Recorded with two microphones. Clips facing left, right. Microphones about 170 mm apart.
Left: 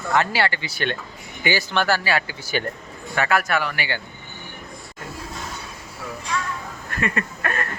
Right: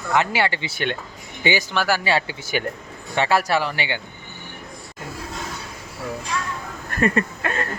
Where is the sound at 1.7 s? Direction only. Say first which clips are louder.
Left 1 dB; 10° right (ahead or behind).